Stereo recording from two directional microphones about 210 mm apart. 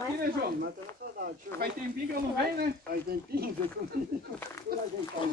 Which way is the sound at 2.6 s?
45° right (ahead or behind).